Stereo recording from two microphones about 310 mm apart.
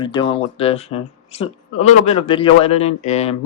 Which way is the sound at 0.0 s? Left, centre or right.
Centre.